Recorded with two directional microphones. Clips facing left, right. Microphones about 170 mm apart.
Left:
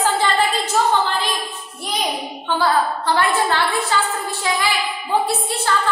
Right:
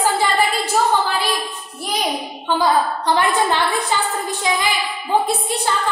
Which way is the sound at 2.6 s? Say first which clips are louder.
Right 1 dB; 15° right (ahead or behind).